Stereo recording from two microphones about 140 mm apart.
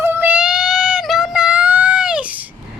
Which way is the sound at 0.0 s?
15° right (ahead or behind).